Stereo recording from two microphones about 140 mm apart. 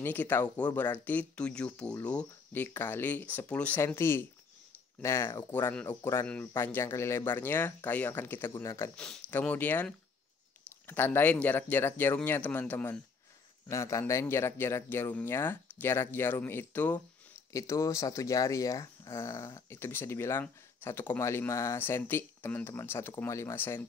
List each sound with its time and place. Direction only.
0.0 s speech: 15° left (ahead or behind)
8.9 s speech: 5° left (ahead or behind)